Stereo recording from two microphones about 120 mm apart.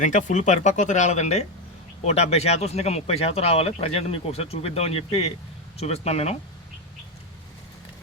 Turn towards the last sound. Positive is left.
turn(degrees=60)  # may be behind; listen again after turning